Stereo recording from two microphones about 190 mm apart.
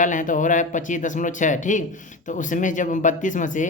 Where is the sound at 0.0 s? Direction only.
40° left (ahead or behind).